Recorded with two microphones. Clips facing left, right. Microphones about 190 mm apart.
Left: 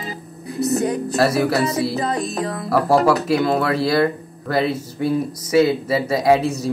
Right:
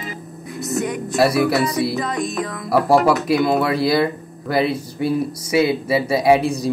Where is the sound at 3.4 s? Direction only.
15° right (ahead or behind).